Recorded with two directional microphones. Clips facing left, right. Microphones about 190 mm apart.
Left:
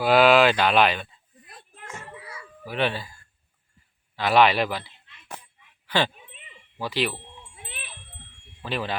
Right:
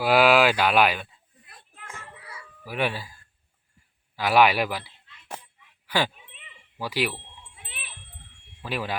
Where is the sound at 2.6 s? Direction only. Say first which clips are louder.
Left 2 dB; 10° right (ahead or behind).